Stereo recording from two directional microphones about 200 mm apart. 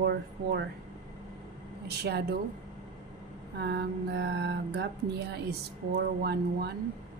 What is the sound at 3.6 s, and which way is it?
Music, 60° right (ahead or behind).